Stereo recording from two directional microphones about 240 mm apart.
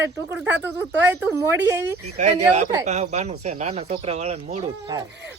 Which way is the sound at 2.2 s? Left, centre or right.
Right.